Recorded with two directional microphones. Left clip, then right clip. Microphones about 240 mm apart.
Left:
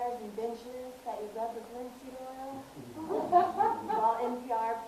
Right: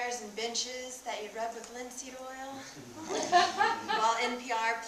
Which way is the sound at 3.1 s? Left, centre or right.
Right.